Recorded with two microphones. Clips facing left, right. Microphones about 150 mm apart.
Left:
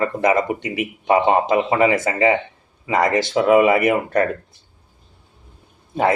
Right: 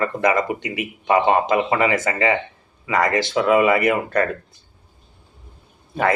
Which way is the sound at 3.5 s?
20° left (ahead or behind).